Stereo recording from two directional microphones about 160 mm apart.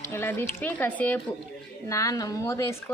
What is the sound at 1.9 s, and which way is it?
Speech, 20° left (ahead or behind).